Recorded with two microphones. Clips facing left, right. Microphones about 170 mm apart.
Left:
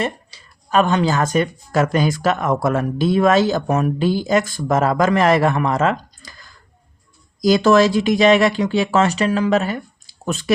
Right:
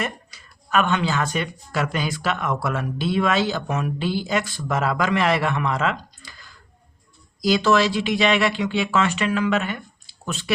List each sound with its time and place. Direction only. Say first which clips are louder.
0.0 s speech: left 5 dB; 30° left (ahead or behind); by 10.5 s 45° left (ahead or behind)